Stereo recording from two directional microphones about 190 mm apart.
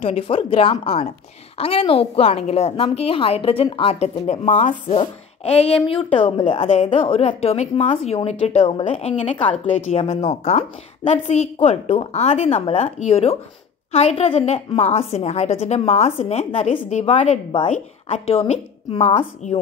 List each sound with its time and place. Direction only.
0.0 s a woman's voice: 30° left (ahead or behind)